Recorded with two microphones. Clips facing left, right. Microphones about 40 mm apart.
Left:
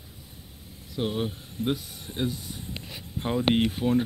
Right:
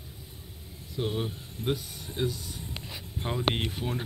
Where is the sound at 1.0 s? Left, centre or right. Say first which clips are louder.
Left 3 dB; centre.